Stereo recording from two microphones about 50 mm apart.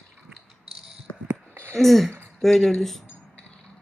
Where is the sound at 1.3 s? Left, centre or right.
Right.